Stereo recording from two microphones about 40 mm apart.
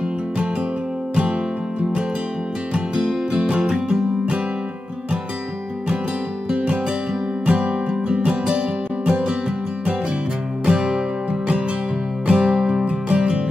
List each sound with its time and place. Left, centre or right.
3.3 s music: right
6.5 s music: right
10.6 s music: centre
12.3 s music: right